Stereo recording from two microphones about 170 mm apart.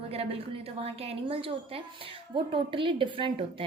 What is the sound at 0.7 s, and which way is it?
A woman's voice, 35° right (ahead or behind).